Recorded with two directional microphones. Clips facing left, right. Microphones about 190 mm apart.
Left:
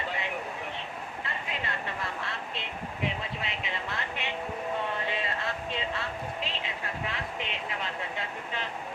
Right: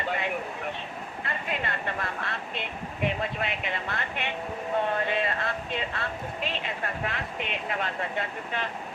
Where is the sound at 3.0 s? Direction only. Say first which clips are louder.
Right 6 dB; 55° right (ahead or behind).